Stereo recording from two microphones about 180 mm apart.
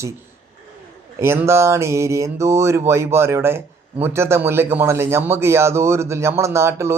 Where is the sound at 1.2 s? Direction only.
15° right (ahead or behind).